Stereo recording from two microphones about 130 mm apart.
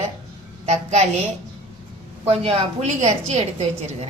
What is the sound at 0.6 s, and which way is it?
Speech, 55° right (ahead or behind).